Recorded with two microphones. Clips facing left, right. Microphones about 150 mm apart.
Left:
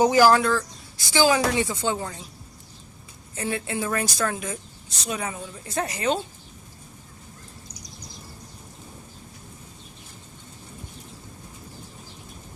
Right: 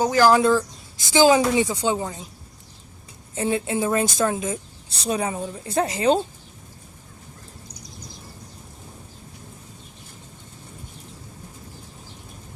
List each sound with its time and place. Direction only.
0.0 s speech: 15° left (ahead or behind)
0.3 s speech: 20° right (ahead or behind)
3.3 s a woman's voice: 25° right (ahead or behind)